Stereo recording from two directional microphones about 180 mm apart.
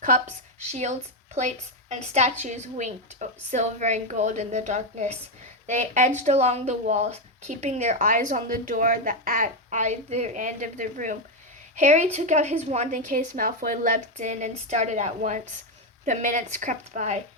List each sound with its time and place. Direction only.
0.0 s a woman's voice: 40° right (ahead or behind)